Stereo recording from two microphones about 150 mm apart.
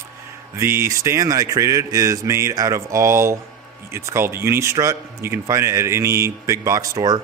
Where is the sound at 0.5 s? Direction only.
20° right (ahead or behind).